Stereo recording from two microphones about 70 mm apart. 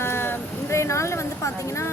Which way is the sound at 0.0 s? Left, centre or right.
Left.